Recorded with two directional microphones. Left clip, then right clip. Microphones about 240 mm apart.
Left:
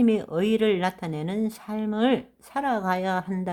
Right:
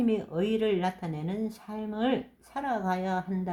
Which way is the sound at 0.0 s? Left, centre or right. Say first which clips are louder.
Left 5 dB; left.